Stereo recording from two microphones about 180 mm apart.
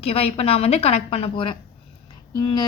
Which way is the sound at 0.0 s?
35° left (ahead or behind).